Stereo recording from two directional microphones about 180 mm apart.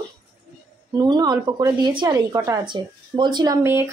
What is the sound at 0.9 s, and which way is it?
Speech, 25° right (ahead or behind).